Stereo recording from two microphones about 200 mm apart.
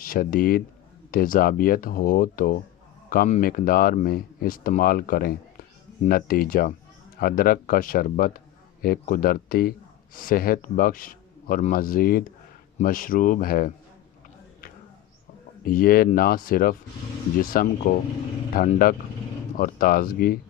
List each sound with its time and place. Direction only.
0.0 s speech: 45° left (ahead or behind)
15.6 s speech: 45° left (ahead or behind)